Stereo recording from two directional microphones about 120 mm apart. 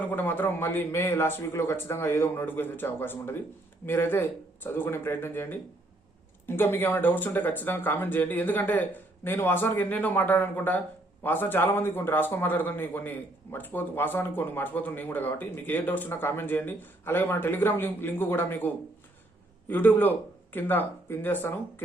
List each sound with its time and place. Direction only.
0.0 s a man's voice: 15° left (ahead or behind)